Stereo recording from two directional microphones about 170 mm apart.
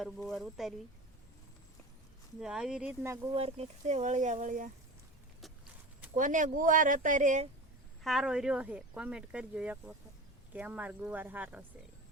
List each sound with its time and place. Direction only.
0.0 s speech: centre (ahead or behind)
2.4 s speech: 5° right (ahead or behind)
3.3 s speech: 35° right (ahead or behind)
6.1 s speech: 50° right (ahead or behind)
8.0 s speech: centre (ahead or behind)